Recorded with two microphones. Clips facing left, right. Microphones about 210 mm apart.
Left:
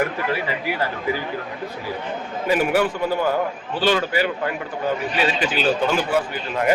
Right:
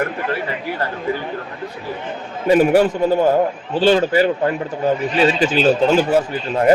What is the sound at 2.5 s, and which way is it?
A man's voice, 30° right (ahead or behind).